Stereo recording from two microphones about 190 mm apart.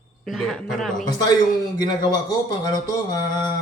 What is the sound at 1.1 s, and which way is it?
Speech, 20° left (ahead or behind).